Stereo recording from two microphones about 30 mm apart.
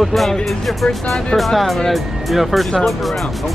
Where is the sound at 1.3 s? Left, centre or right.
Centre.